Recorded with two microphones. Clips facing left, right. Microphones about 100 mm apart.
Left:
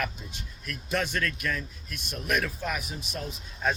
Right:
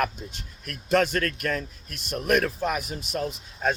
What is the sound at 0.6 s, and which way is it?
A man's voice, 55° right (ahead or behind).